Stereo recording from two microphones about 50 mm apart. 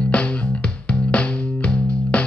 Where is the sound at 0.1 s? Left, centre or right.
Left.